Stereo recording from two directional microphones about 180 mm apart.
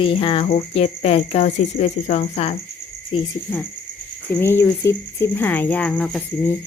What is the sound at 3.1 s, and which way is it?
Speech, 30° left (ahead or behind).